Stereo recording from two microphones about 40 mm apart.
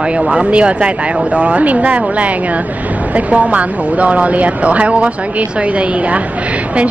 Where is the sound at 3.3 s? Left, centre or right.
Right.